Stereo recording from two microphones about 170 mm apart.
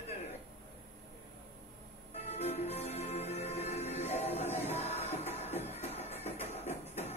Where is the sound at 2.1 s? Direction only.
40° left (ahead or behind).